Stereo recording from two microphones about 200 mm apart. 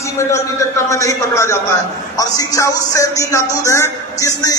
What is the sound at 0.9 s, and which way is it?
A man's voice, 15° left (ahead or behind).